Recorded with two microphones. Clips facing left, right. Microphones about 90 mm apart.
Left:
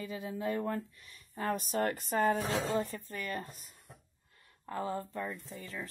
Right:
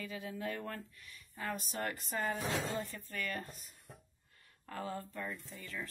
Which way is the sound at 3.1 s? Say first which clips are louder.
Left 2 dB; 20° left (ahead or behind).